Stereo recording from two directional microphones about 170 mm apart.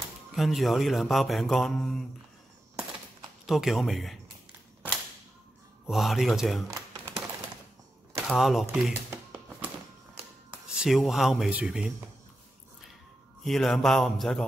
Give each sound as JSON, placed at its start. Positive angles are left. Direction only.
{"t": 0.3, "sound": "speech", "side_deg": 0}
{"t": 3.4, "sound": "speech", "side_deg": 0}
{"t": 5.9, "sound": "speech", "side_deg": 0}
{"t": 6.7, "sound": "typing", "side_deg": -20}
{"t": 8.3, "sound": "a sound", "side_deg": 0}
{"t": 10.7, "sound": "speech", "side_deg": -5}
{"t": 13.4, "sound": "speech", "side_deg": 0}